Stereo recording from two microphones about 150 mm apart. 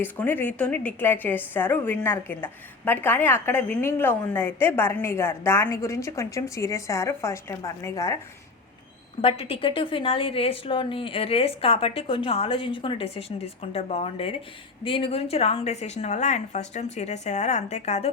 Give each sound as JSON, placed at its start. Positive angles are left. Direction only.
{"t": 0.0, "sound": "a woman's voice", "side_deg": 10}
{"t": 9.2, "sound": "a woman's voice", "side_deg": 40}